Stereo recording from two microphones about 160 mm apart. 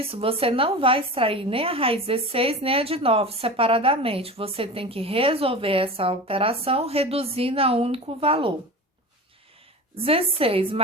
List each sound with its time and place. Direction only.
0.0 s a woman's voice: 35° right (ahead or behind)
9.9 s a woman's voice: 35° right (ahead or behind)